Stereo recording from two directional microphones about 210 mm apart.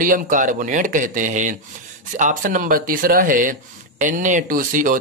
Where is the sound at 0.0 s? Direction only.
40° right (ahead or behind).